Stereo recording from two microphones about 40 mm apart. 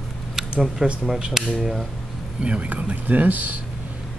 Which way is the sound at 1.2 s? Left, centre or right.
Right.